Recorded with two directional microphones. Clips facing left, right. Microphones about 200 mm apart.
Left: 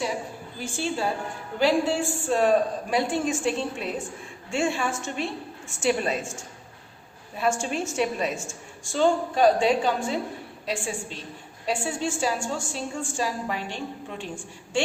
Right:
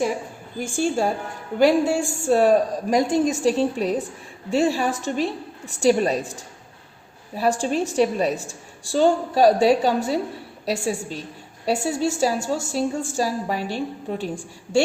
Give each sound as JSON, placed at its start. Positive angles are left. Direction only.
{"t": 0.8, "sound": "a woman's voice", "side_deg": -45}